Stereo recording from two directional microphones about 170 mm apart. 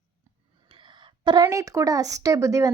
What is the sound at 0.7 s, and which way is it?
A woman's voice, 30° right (ahead or behind).